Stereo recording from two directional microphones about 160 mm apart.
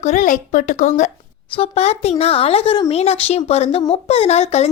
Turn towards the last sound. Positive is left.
turn(degrees=45)  # may be behind; listen again after turning